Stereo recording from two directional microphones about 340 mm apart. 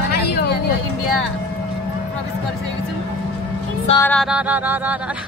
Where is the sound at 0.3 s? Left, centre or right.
Left.